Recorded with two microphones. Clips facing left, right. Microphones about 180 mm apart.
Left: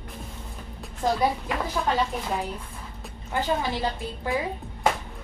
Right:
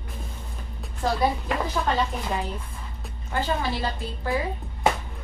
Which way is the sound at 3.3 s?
15° left (ahead or behind).